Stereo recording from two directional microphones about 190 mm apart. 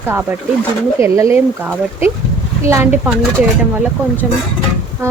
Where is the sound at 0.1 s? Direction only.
10° right (ahead or behind).